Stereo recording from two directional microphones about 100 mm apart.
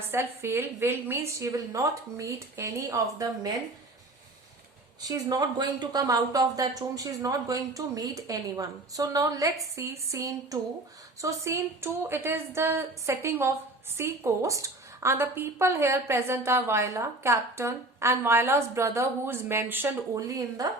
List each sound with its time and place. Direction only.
0.1 s a woman's voice: 25° right (ahead or behind)
5.0 s a woman's voice: 35° right (ahead or behind); by 19.9 s 20° right (ahead or behind)
20.1 s speech: 35° right (ahead or behind)